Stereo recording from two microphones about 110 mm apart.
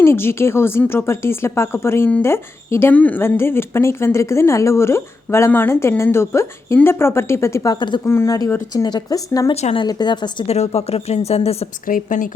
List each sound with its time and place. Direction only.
0.0 s speech: 20° left (ahead or behind); by 8.0 s 45° left (ahead or behind)
8.0 s speech: 25° left (ahead or behind)
8.7 s speech: 35° left (ahead or behind)
9.7 s a woman's voice: 45° left (ahead or behind)
10.4 s speech: 70° left (ahead or behind)